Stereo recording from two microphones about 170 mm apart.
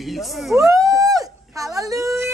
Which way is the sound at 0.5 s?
20° right (ahead or behind).